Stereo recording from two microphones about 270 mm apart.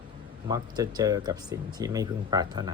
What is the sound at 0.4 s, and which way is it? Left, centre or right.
Speech, centre.